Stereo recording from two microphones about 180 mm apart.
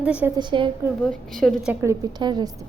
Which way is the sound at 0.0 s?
5° right (ahead or behind).